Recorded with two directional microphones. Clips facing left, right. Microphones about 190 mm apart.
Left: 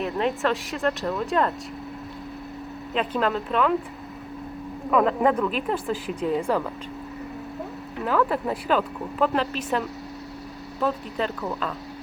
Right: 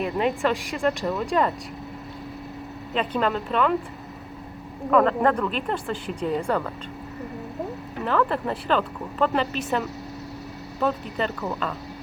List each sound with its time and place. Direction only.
0.0 s speech: 5° right (ahead or behind)
2.9 s speech: centre (ahead or behind)
4.9 s speech: 5° left (ahead or behind)
8.0 s speech: 5° left (ahead or behind)